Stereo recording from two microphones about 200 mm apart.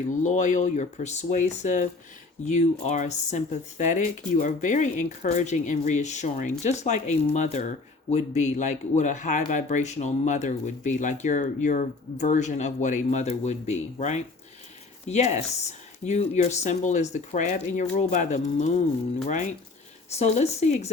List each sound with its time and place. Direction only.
0.1 s speech: 35° left (ahead or behind)